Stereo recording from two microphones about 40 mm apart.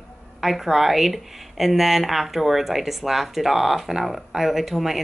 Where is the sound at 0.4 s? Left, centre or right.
Centre.